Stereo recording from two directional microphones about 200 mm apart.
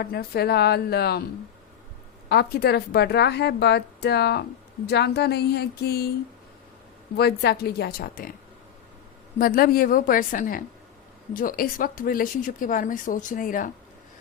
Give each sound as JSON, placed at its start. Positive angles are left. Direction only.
{"t": 0.0, "sound": "speech", "side_deg": 50}
{"t": 2.3, "sound": "a woman's voice", "side_deg": 55}
{"t": 7.2, "sound": "speech", "side_deg": 55}
{"t": 9.4, "sound": "speech", "side_deg": 45}